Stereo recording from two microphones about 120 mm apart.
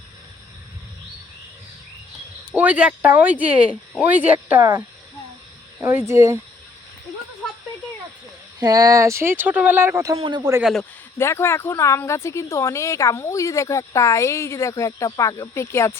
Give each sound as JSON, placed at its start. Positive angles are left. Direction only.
{"t": 2.5, "sound": "speech", "side_deg": -10}
{"t": 6.1, "sound": "speech", "side_deg": -25}
{"t": 8.5, "sound": "speech", "side_deg": -30}
{"t": 10.2, "sound": "a man's voice", "side_deg": -45}
{"t": 10.6, "sound": "a man's voice", "side_deg": 0}
{"t": 11.2, "sound": "speech", "side_deg": 20}